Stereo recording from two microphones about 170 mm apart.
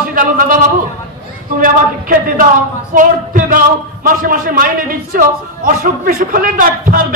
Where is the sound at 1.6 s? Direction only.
55° right (ahead or behind).